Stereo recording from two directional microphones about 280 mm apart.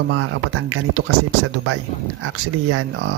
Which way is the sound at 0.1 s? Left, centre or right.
Right.